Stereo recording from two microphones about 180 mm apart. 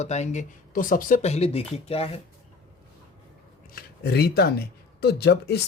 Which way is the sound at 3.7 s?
60° left (ahead or behind).